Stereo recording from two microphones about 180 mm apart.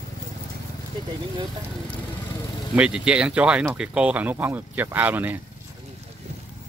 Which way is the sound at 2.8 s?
5° right (ahead or behind).